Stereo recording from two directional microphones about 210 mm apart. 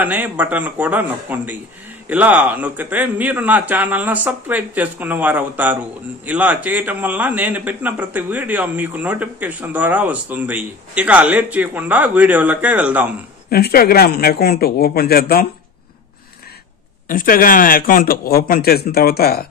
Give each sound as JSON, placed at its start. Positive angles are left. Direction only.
{"t": 0.0, "sound": "a man's voice", "side_deg": -10}
{"t": 13.5, "sound": "speech", "side_deg": 45}
{"t": 17.1, "sound": "speech", "side_deg": 40}